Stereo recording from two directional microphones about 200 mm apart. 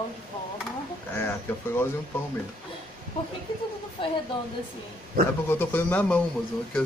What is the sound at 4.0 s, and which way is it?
Speech, 25° left (ahead or behind).